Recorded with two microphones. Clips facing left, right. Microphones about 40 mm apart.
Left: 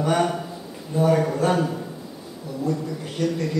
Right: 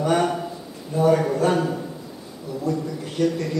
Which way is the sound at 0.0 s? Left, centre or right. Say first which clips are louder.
Right 1 dB; centre.